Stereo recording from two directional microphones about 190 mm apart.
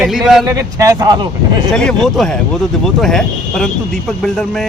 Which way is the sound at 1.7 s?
5° left (ahead or behind).